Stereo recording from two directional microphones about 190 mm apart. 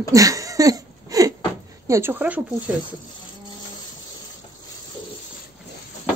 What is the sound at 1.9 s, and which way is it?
Speech, 10° right (ahead or behind).